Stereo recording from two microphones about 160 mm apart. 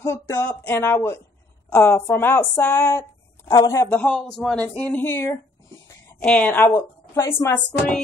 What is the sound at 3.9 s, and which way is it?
A woman's voice, 5° left (ahead or behind).